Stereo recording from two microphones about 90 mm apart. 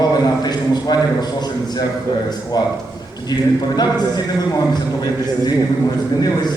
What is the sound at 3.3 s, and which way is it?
Speech, 50° left (ahead or behind).